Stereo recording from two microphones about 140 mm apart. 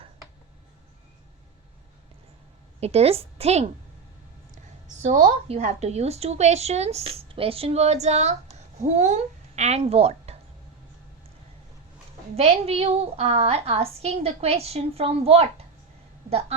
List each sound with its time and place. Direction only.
2.8 s a woman's voice: 45° right (ahead or behind)
5.0 s a woman's voice: 70° right (ahead or behind)
5.5 s a woman's voice: 55° right (ahead or behind)
12.4 s a woman's voice: 50° right (ahead or behind)